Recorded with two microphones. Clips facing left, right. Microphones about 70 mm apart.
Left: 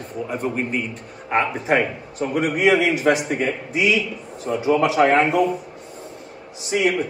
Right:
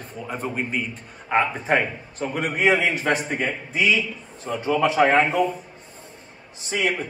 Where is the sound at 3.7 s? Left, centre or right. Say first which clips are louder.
Even; centre.